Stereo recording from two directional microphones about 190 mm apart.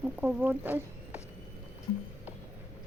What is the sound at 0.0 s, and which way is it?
Speech, 10° right (ahead or behind).